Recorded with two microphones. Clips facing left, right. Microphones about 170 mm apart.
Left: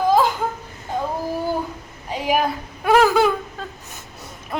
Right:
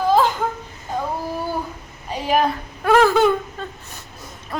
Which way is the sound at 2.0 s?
15° left (ahead or behind).